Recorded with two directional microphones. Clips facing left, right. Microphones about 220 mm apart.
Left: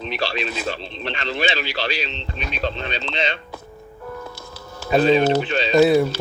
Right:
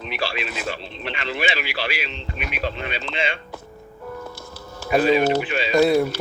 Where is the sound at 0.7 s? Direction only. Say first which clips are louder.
Left 2 dB; 5° right (ahead or behind).